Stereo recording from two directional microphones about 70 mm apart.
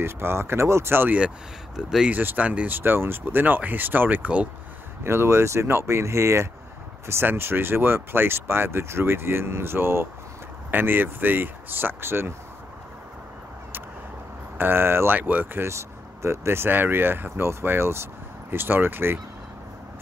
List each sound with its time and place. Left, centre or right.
0.0 s speech: right
1.8 s speech: centre
2.0 s speech: right
2.8 s speech: right
5.0 s speech: right
14.6 s speech: right
15.6 s speech: right